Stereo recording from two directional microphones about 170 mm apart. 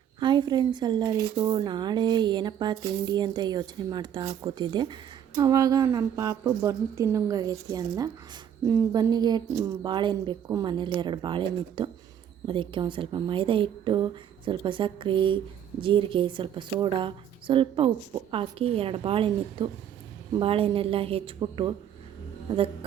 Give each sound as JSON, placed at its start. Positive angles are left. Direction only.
{"t": 0.2, "sound": "a woman's voice", "side_deg": -25}